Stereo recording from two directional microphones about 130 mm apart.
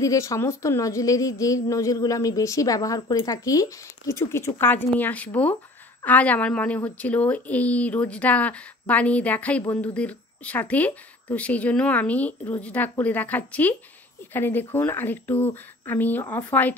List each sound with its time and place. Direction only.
0.0 s a woman's voice: 25° left (ahead or behind)